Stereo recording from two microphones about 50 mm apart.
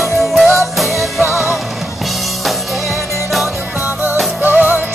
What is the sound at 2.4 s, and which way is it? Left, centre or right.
Music, centre.